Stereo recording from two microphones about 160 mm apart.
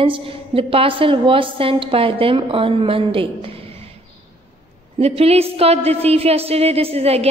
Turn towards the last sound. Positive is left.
turn(degrees=-40)  # may be behind; listen again after turning